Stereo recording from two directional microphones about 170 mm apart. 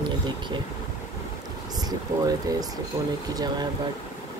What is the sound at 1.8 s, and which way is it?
Speech, 20° right (ahead or behind).